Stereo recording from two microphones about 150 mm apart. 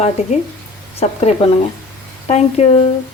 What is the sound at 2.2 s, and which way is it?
Speech, 45° left (ahead or behind).